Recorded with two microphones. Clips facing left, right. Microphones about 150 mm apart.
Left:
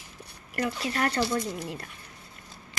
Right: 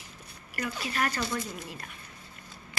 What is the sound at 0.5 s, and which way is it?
Speech, 60° left (ahead or behind).